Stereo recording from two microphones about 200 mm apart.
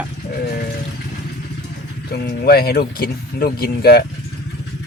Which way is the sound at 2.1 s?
50° left (ahead or behind).